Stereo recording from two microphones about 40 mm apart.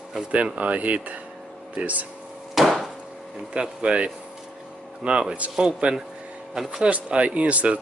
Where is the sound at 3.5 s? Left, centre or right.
Right.